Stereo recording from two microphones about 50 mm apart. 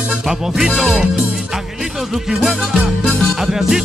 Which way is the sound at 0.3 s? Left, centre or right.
Centre.